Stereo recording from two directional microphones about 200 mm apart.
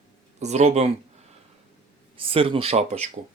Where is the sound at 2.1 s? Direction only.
25° right (ahead or behind).